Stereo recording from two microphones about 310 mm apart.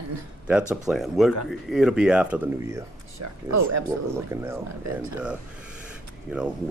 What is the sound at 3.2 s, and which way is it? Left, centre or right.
Speech, right.